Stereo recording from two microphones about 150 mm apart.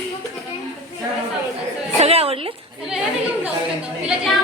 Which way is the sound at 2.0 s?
40° right (ahead or behind).